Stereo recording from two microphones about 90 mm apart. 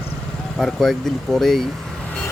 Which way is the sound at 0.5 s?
Centre (ahead or behind).